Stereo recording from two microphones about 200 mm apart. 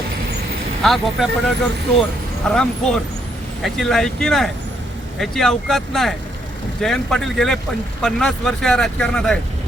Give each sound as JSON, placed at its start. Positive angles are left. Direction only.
{"t": 0.8, "sound": "speech", "side_deg": 0}